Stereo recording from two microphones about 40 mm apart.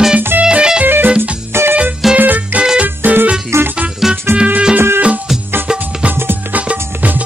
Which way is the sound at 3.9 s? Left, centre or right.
Centre.